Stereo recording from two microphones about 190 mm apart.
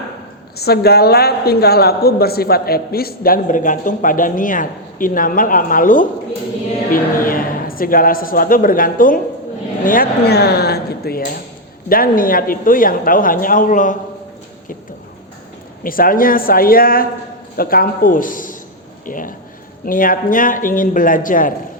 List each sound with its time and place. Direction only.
0.5 s a woman's voice: 55° left (ahead or behind)
15.8 s a woman's voice: 50° left (ahead or behind)